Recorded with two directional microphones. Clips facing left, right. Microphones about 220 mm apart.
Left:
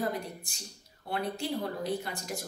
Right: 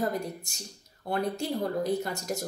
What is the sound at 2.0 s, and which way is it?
Speech, 45° right (ahead or behind).